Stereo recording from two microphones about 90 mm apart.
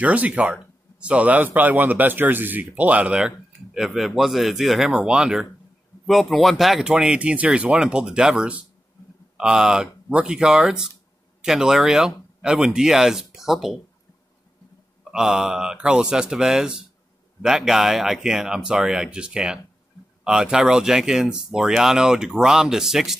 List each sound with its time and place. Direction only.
0.0 s speech: 15° right (ahead or behind)
15.0 s speech: 5° right (ahead or behind)